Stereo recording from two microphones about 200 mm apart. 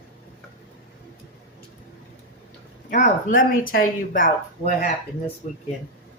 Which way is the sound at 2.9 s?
40° left (ahead or behind).